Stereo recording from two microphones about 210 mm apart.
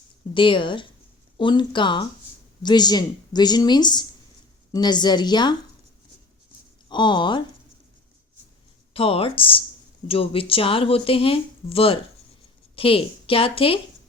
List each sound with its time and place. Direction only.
0.3 s speech: 25° left (ahead or behind)
6.8 s speech: 20° left (ahead or behind)
8.9 s a woman's voice: 25° left (ahead or behind)